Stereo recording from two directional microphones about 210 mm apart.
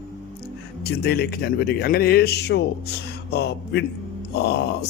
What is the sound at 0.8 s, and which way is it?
A man's voice, 50° left (ahead or behind).